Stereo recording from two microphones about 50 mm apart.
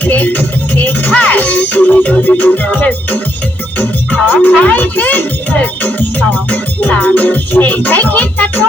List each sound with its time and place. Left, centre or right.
0.0 s music: left